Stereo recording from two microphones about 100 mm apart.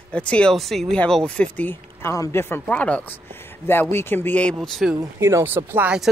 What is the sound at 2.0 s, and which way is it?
Speech, 30° left (ahead or behind).